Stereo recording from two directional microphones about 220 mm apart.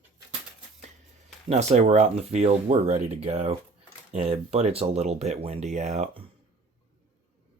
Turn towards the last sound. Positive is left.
turn(degrees=-30)  # may be behind; listen again after turning